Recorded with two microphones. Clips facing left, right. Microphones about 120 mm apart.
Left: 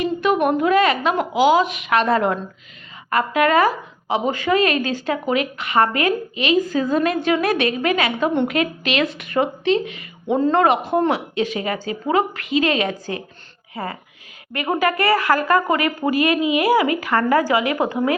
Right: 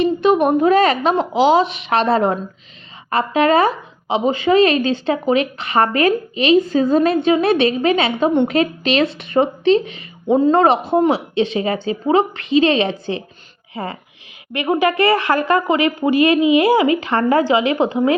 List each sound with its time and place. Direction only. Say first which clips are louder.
0.0 s a woman's voice: right 4 dB; 25° right (ahead or behind)
10.2 s a woman's voice: right 3 dB; 15° right (ahead or behind)